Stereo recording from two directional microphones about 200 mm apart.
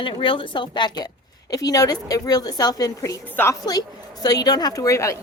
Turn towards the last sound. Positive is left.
turn(degrees=15)  # may be behind; listen again after turning